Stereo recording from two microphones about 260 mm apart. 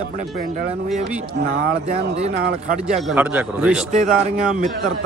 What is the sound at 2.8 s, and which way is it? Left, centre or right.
Speech, centre.